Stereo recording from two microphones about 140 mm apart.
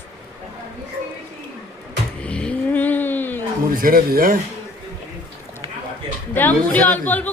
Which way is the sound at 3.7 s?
90° right.